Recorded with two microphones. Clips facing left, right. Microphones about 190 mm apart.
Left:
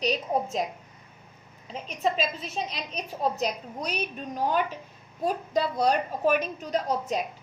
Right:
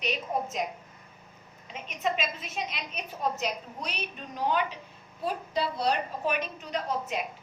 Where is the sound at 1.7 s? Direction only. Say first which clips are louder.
Left 3 dB; 35° left (ahead or behind).